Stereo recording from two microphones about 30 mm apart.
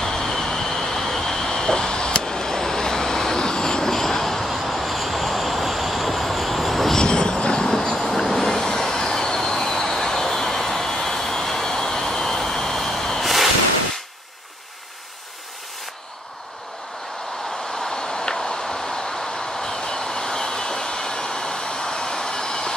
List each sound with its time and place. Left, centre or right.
0.0 s vehicle: centre
1.6 s vehicle: left
4.5 s vehicle: centre
7.0 s vehicle: left
8.3 s train: centre
13.2 s a sound: centre
17.8 s vehicle: left